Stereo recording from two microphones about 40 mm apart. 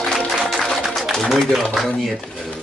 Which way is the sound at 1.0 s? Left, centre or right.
Centre.